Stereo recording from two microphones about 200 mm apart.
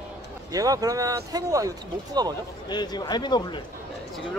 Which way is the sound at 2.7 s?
20° left (ahead or behind).